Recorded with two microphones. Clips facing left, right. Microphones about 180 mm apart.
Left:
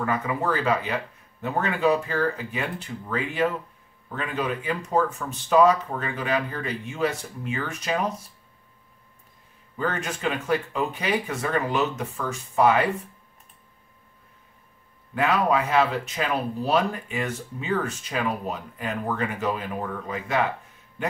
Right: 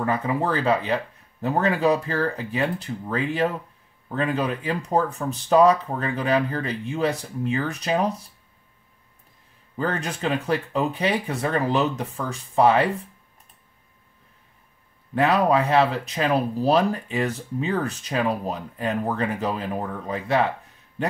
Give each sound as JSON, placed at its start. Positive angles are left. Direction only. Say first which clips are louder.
{"t": 0.0, "sound": "speech", "louder": "right 2 dB", "side_deg": -35}
{"t": 9.8, "sound": "speech", "louder": "right 2 dB", "side_deg": -35}
{"t": 15.1, "sound": "speech", "louder": "right 3 dB", "side_deg": -35}